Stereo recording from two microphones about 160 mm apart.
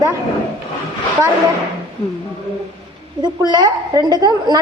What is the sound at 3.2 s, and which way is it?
A woman's voice, 25° right (ahead or behind).